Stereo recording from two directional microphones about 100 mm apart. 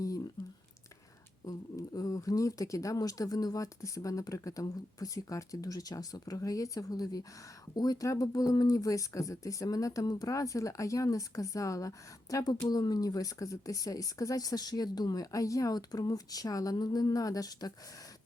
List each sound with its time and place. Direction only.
1.5 s speech: 35° left (ahead or behind)